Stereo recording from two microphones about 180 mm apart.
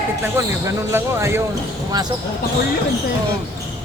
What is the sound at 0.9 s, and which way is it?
Speech, 15° right (ahead or behind).